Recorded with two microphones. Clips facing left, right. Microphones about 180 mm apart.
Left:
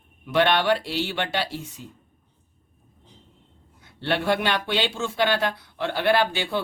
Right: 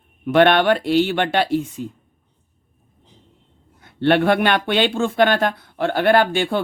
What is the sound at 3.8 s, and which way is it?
Speech, 55° right (ahead or behind).